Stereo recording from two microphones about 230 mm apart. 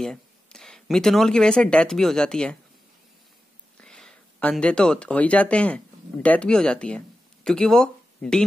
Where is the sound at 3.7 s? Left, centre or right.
Centre.